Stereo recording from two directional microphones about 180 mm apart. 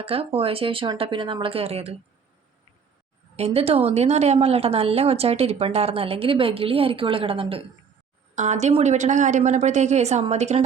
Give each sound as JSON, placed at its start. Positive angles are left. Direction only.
{"t": 0.0, "sound": "a woman's voice", "side_deg": -30}
{"t": 3.3, "sound": "a woman's voice", "side_deg": -35}